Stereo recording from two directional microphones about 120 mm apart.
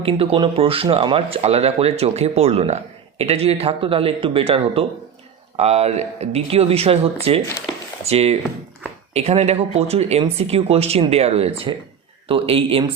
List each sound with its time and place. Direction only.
0.0 s speech: 50° right (ahead or behind)
5.5 s speech: 65° right (ahead or behind)